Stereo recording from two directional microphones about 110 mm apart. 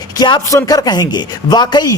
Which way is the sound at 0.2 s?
40° left (ahead or behind).